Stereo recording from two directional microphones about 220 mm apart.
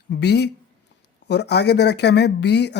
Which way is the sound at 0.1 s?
50° left (ahead or behind).